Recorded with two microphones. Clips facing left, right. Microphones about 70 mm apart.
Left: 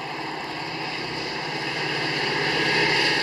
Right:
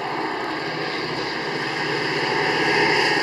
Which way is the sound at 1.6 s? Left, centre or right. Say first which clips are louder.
Right 2 dB; right.